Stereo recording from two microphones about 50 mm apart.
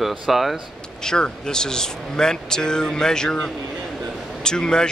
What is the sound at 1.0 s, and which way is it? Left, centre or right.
Speech, centre.